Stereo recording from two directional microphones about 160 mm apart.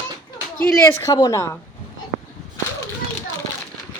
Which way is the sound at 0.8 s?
20° left (ahead or behind).